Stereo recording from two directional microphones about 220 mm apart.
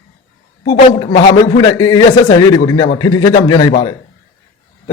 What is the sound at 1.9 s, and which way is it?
A man's voice, 15° left (ahead or behind).